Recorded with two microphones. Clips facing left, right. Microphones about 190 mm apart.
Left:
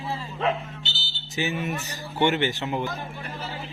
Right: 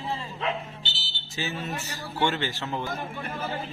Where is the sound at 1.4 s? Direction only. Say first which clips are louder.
Left 4 dB; 15° left (ahead or behind).